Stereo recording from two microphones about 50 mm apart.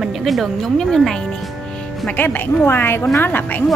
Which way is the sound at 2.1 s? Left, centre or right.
Left.